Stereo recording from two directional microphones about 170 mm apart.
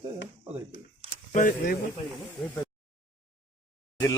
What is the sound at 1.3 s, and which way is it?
Speech, 50° left (ahead or behind).